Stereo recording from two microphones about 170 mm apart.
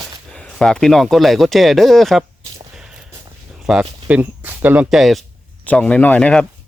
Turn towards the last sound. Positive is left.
turn(degrees=5)  # may be behind; listen again after turning